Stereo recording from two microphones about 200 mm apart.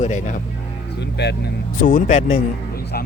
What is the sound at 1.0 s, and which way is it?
Speech, 55° left (ahead or behind).